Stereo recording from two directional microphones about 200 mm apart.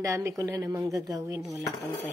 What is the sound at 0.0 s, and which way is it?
A woman's voice, 15° right (ahead or behind).